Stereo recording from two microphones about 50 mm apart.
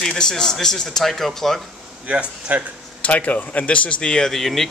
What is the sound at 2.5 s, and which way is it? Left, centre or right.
Speech, right.